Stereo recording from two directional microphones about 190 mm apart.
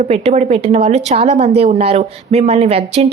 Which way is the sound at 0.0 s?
35° right (ahead or behind).